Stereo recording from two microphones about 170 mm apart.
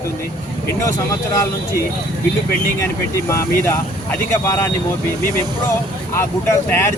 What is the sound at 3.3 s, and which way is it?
Speech, 15° left (ahead or behind).